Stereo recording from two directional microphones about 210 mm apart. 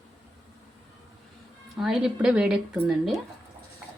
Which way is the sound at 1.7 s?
Centre (ahead or behind).